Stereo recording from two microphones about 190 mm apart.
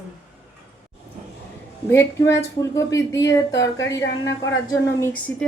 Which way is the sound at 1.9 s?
10° left (ahead or behind).